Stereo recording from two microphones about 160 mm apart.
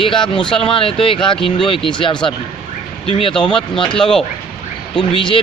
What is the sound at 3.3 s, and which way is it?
Speech, 5° left (ahead or behind).